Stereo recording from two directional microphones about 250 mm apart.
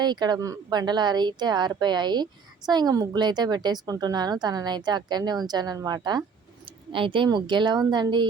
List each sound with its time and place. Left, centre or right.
0.0 s a woman's voice: centre